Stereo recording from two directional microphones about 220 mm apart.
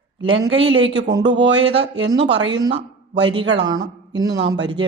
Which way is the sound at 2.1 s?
55° right (ahead or behind).